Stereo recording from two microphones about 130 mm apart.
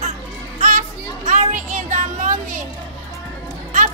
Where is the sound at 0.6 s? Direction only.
75° right (ahead or behind).